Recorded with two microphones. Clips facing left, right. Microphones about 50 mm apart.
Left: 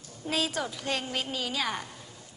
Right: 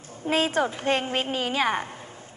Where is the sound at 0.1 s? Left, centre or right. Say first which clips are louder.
Right 6 dB; right.